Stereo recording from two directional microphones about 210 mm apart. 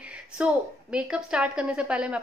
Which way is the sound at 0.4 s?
5° right (ahead or behind).